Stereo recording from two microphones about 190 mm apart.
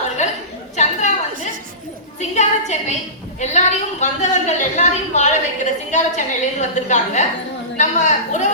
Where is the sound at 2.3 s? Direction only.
35° left (ahead or behind).